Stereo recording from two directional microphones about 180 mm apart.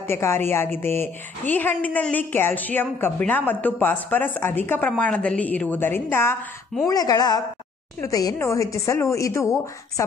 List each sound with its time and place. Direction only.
0.0 s a woman's voice: 15° left (ahead or behind)